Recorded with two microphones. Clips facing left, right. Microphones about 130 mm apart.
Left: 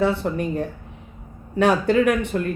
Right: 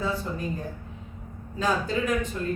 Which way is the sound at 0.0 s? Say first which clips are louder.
Left 8 dB; 70° left (ahead or behind).